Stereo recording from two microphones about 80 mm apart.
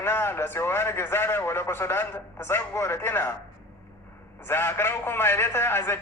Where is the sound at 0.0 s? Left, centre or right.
Left.